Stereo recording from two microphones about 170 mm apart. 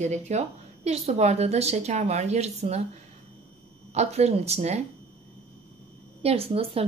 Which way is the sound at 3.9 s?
40° right (ahead or behind).